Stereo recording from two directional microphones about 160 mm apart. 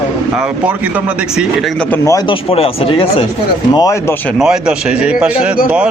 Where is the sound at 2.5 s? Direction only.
35° left (ahead or behind).